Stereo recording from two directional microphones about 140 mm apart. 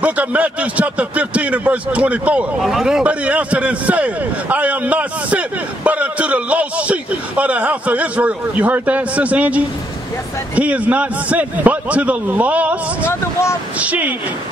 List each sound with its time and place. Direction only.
0.0 s a man's voice: 10° right (ahead or behind)
13.0 s speech: 20° left (ahead or behind)
13.7 s a man's voice: 10° right (ahead or behind)